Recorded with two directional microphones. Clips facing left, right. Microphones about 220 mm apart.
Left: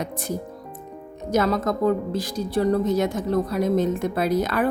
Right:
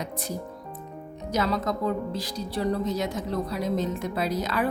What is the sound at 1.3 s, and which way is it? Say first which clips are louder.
A woman's voice: left 5 dB; 50° left (ahead or behind).